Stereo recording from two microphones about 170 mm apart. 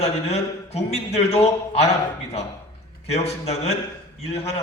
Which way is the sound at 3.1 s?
40° left (ahead or behind).